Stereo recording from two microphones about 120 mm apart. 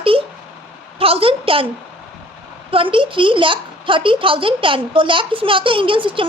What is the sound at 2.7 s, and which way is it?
A woman's voice, 45° right (ahead or behind).